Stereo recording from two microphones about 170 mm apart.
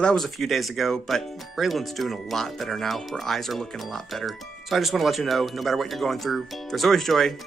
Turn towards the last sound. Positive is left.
turn(degrees=0)  # may be behind; listen again after turning